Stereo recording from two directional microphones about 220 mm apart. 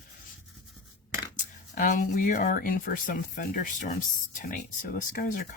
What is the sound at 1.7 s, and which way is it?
Speech, 35° left (ahead or behind).